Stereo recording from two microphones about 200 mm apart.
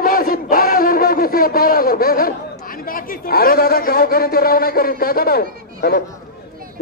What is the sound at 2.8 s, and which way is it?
A man's voice, 45° left (ahead or behind).